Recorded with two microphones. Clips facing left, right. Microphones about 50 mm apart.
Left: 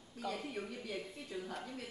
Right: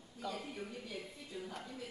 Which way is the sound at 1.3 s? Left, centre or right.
Left.